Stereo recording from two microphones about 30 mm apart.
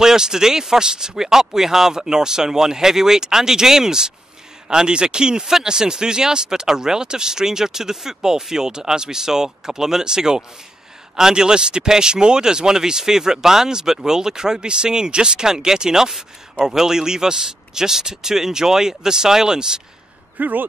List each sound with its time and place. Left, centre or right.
0.0 s speech: centre
20.3 s speech: right